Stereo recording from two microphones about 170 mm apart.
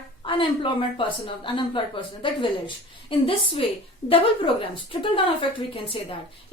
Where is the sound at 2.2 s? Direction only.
30° left (ahead or behind).